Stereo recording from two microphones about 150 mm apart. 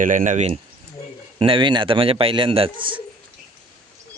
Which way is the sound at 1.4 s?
35° right (ahead or behind).